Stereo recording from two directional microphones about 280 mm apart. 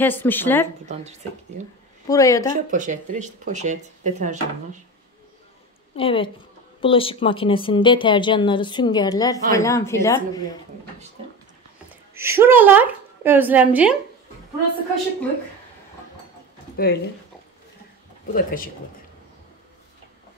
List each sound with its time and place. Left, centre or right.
0.0 s speech: centre
2.0 s speech: centre
2.5 s speech: right
5.9 s a woman's voice: centre
12.1 s a woman's voice: centre
16.7 s speech: left
18.3 s a woman's voice: left